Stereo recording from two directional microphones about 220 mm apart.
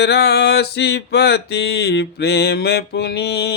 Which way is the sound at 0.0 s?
50° left (ahead or behind).